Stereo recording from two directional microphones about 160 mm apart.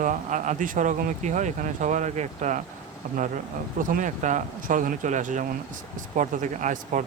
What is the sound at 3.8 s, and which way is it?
Speech, 55° right (ahead or behind).